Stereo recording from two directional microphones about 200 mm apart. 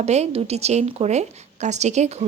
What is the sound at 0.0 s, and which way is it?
A woman's voice, 35° right (ahead or behind).